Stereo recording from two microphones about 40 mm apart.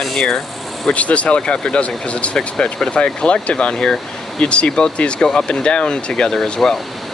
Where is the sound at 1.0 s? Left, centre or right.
Left; by 6.7 s centre.